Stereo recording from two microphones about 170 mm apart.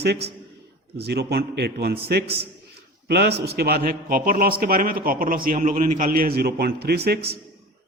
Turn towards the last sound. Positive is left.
turn(degrees=-65)  # may be behind; listen again after turning